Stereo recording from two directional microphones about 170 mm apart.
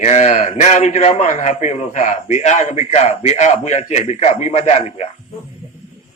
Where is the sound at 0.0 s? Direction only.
45° left (ahead or behind).